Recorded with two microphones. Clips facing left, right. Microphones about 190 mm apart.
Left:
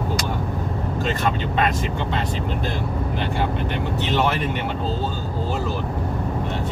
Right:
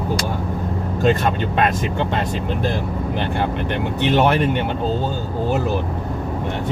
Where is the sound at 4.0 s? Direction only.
55° right (ahead or behind).